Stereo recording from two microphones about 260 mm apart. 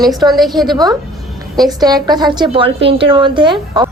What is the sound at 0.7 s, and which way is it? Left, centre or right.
A woman's voice, centre.